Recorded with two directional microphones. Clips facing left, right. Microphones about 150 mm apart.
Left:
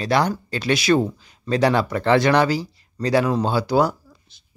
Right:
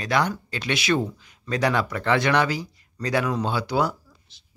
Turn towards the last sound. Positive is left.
turn(degrees=45)  # may be behind; listen again after turning